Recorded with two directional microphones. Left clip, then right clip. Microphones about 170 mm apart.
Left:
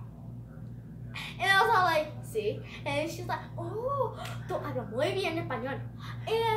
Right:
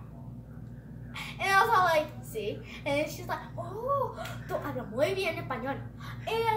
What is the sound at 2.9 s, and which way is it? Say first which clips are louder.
Child singing: right 2 dB; 25° left (ahead or behind).